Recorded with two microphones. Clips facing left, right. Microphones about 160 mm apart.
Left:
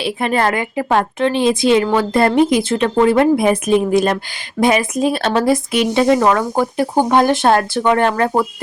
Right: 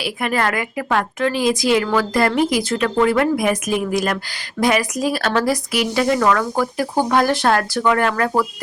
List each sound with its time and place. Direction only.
0.0 s a woman's voice: 25° left (ahead or behind)